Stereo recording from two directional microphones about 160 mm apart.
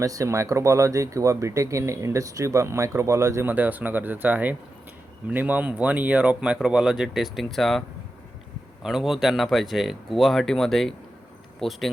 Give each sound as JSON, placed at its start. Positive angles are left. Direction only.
{"t": 0.0, "sound": "speech", "side_deg": -20}